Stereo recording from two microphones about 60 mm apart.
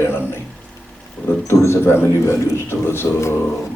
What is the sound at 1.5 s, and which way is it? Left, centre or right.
Speech, left.